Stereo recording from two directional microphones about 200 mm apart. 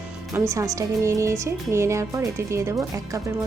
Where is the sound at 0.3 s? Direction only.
15° right (ahead or behind).